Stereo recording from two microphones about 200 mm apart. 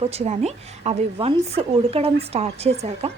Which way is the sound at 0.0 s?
30° right (ahead or behind).